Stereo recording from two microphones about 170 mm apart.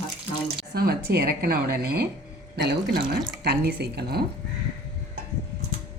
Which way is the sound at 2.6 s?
80° right.